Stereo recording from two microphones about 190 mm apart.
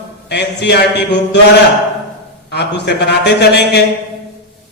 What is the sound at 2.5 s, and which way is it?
A man's voice, 60° left (ahead or behind).